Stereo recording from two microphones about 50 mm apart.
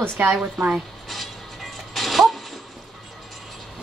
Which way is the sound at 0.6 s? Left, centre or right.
Centre.